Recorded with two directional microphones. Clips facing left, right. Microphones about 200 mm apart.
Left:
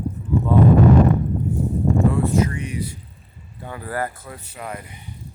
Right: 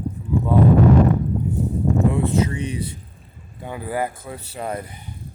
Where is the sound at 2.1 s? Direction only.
25° right (ahead or behind).